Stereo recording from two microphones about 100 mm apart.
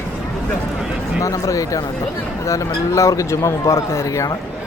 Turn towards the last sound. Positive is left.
turn(degrees=35)  # may be behind; listen again after turning